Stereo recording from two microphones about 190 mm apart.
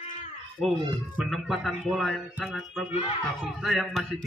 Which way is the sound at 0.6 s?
5° left (ahead or behind).